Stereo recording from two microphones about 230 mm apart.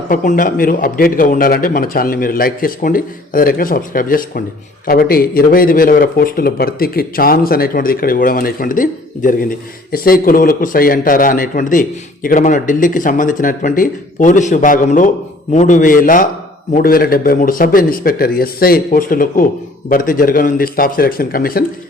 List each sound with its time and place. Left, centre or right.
0.1 s speech: left